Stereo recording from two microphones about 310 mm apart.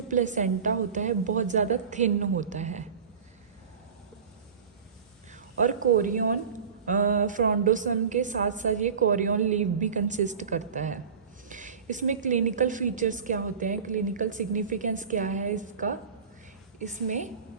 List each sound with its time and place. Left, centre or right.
0.1 s a woman's voice: right
6.0 s a woman's voice: right